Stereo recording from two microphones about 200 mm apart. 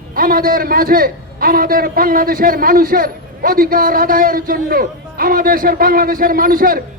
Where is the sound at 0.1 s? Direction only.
45° right (ahead or behind).